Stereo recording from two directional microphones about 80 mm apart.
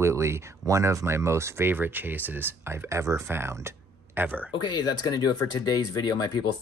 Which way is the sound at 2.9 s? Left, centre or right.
Right.